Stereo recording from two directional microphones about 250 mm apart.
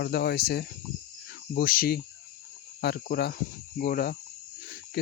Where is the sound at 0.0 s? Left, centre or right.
Left.